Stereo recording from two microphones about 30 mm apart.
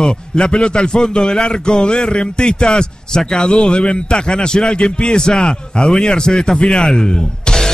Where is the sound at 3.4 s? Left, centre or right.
Left.